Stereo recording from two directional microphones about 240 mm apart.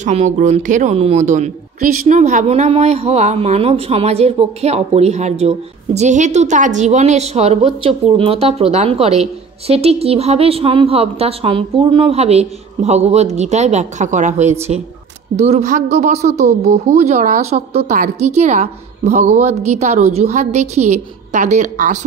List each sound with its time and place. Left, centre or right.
0.0 s a woman's voice: right